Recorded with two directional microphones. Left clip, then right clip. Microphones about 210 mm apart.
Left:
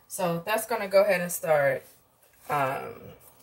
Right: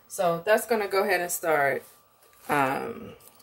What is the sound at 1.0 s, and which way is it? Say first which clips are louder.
Speech: even; 50° right (ahead or behind).